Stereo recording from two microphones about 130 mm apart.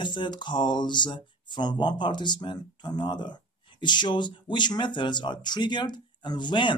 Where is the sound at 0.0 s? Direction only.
35° left (ahead or behind).